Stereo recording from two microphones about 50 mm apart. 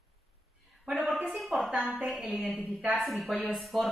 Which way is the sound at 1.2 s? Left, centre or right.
Centre.